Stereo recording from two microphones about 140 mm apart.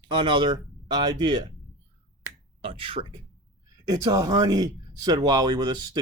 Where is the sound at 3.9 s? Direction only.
25° right (ahead or behind).